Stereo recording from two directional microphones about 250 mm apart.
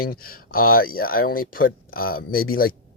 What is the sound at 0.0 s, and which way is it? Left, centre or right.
Speech, left.